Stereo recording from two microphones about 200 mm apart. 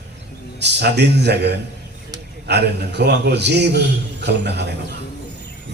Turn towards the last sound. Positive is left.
turn(degrees=-55)  # may be behind; listen again after turning